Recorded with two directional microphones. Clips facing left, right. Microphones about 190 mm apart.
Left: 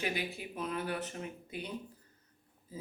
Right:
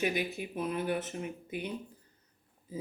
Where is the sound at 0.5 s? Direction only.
15° right (ahead or behind).